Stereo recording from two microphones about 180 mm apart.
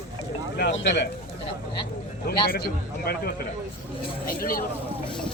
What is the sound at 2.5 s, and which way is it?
Speech, 60° left (ahead or behind).